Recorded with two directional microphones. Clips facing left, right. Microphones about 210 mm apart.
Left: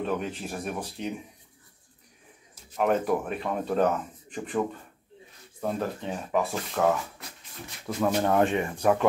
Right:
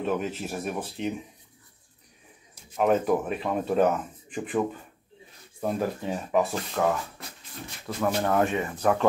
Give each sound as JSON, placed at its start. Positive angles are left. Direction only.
{"t": 0.0, "sound": "speech", "side_deg": -5}
{"t": 2.7, "sound": "speech", "side_deg": 0}
{"t": 7.8, "sound": "speech", "side_deg": 15}